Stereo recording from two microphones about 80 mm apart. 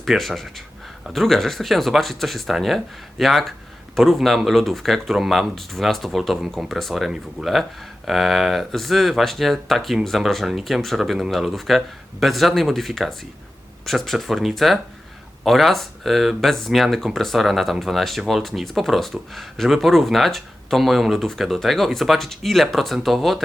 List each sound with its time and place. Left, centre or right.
0.0 s speech: centre